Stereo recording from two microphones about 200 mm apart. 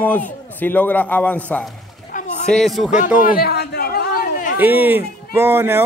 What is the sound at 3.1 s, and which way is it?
A man's voice, 45° left (ahead or behind).